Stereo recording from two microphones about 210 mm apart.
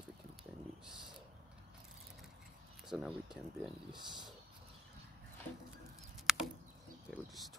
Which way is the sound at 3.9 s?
20° right (ahead or behind).